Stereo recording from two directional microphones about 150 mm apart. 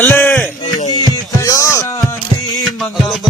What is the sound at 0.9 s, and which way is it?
Music, 25° left (ahead or behind).